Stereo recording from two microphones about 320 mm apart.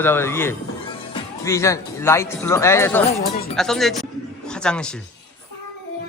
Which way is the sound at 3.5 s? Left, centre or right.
Centre.